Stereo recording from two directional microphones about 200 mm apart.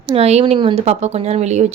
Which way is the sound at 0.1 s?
30° right (ahead or behind).